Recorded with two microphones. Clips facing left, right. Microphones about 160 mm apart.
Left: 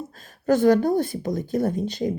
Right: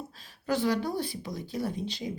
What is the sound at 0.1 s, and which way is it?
Speech, 50° left (ahead or behind).